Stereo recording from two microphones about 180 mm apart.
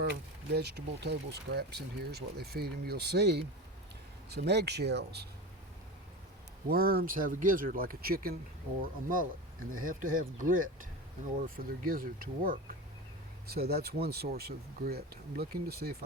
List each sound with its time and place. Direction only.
0.5 s speech: 65° right (ahead or behind)
6.7 s speech: 55° right (ahead or behind)